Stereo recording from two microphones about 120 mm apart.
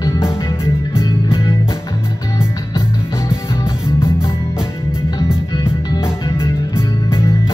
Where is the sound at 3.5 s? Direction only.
20° left (ahead or behind).